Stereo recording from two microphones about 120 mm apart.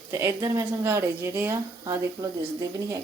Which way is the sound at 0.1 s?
25° right (ahead or behind).